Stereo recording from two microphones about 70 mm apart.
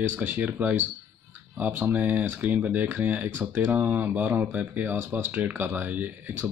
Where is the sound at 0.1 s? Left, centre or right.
Right.